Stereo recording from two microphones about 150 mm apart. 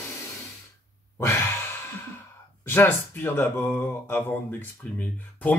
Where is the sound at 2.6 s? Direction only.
15° left (ahead or behind).